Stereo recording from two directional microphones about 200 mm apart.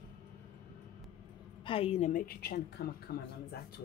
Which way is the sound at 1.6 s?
30° left (ahead or behind).